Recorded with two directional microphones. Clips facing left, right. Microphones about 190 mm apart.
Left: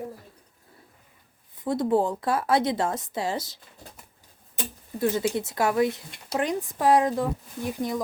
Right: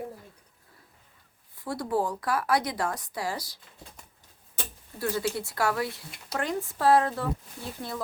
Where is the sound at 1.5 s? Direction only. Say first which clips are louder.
Left 6 dB; 20° left (ahead or behind).